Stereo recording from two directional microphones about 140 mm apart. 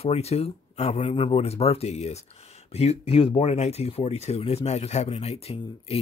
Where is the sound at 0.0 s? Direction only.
45° left (ahead or behind).